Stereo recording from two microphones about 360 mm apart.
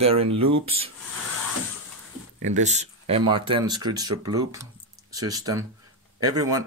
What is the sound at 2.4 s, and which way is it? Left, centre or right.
Speech, centre.